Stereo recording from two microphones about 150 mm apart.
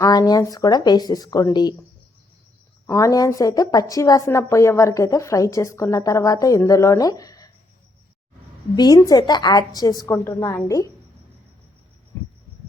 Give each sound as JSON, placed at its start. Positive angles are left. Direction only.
{"t": 0.0, "sound": "a woman's voice", "side_deg": 25}
{"t": 2.8, "sound": "a woman's voice", "side_deg": 20}
{"t": 8.7, "sound": "a woman's voice", "side_deg": 25}